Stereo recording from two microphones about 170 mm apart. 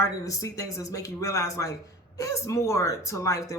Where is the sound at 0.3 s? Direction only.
20° left (ahead or behind).